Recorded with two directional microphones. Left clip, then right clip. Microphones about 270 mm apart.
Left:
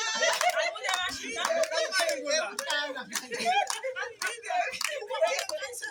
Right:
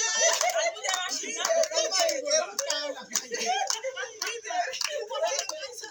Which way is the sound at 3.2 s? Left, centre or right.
Centre.